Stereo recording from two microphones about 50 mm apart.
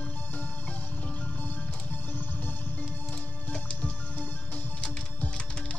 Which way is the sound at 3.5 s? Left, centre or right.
Left.